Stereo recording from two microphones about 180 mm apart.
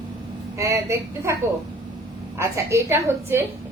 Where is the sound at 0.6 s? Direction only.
15° right (ahead or behind).